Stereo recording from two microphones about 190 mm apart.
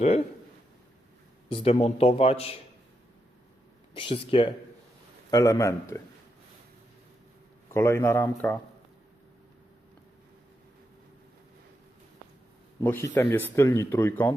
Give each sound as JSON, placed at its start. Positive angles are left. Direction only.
{"t": 1.5, "sound": "a man's voice", "side_deg": 30}
{"t": 3.9, "sound": "speech", "side_deg": 30}
{"t": 5.3, "sound": "speech", "side_deg": 15}
{"t": 7.7, "sound": "speech", "side_deg": 15}
{"t": 12.8, "sound": "speech", "side_deg": 10}